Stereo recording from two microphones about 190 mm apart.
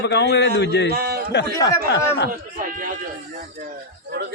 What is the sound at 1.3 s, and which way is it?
Speech, 65° left (ahead or behind).